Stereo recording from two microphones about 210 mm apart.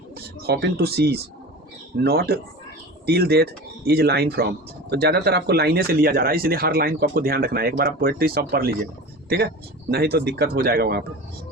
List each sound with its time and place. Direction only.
0.4 s speech: 50° right (ahead or behind)
9.9 s speech: 50° right (ahead or behind)